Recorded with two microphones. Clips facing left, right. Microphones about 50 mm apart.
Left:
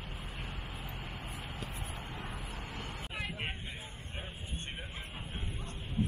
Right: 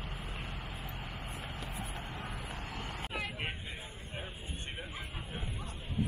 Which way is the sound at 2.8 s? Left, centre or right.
Centre.